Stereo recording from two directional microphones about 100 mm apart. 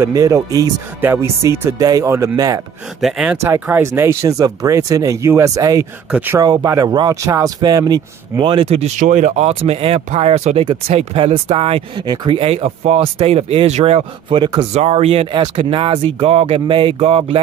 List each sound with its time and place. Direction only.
0.0 s speech: 35° right (ahead or behind)
1.0 s speech: 25° right (ahead or behind)
1.8 s speech: 35° right (ahead or behind)
3.0 s speech: centre (ahead or behind)
3.3 s speech: 20° right (ahead or behind); by 8.6 s 50° right (ahead or behind)
9.4 s speech: 85° right
10.6 s speech: 75° right (ahead or behind)
12.1 s speech: 60° right (ahead or behind); by 13.1 s 90° right
13.3 s speech: 80° right
15.3 s speech: 55° right (ahead or behind)